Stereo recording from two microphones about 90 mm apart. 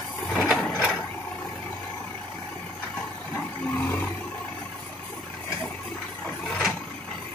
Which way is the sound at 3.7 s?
20° left (ahead or behind).